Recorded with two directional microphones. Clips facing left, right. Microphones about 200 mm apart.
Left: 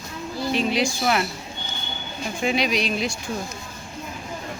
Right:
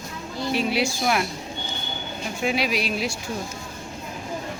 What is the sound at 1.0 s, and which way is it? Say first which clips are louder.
Speech: left 1 dB; 5° left (ahead or behind).